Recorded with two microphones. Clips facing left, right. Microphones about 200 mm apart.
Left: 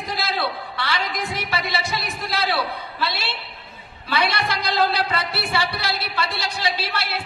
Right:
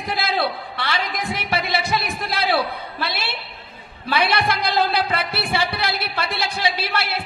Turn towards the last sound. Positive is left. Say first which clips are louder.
# right 2 dB
turn(degrees=-55)  # may be behind; listen again after turning